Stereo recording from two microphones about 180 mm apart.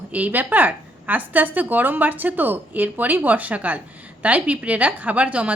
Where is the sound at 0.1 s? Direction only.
10° right (ahead or behind).